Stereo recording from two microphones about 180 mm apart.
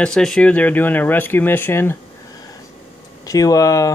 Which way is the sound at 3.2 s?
20° left (ahead or behind).